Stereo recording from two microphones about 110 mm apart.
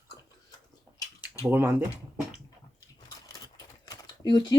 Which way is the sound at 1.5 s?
20° right (ahead or behind).